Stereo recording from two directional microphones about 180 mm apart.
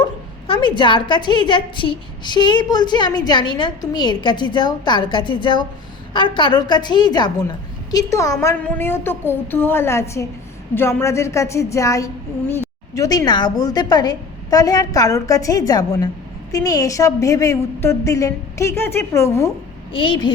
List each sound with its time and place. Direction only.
0.0 s a woman's voice: 25° left (ahead or behind)
19.9 s a woman's voice: 30° left (ahead or behind)